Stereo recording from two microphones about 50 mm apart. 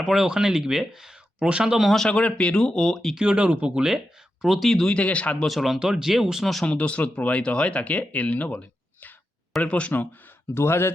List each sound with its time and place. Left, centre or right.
0.0 s speech: centre
2.0 s speech: left
3.2 s speech: right
4.4 s speech: centre
4.7 s speech: centre
4.9 s speech: left
5.5 s speech: centre
6.7 s speech: left
10.5 s a man's voice: left